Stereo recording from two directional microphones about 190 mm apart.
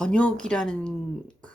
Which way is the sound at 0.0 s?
5° left (ahead or behind).